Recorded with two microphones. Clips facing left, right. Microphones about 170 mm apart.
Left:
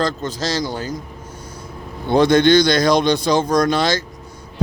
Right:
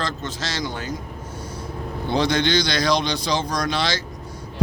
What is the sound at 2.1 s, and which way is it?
Speech, 50° left (ahead or behind).